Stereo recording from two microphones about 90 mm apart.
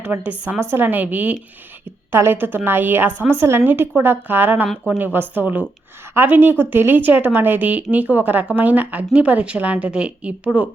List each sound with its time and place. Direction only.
0.0 s a woman's voice: 20° right (ahead or behind)